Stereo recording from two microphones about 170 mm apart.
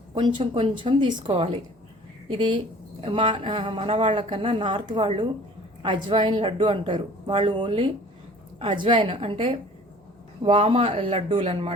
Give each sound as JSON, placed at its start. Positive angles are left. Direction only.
{"t": 0.1, "sound": "a woman's voice", "side_deg": -30}